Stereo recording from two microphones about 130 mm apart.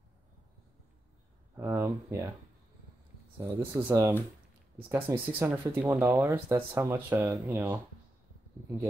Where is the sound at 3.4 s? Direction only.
20° right (ahead or behind).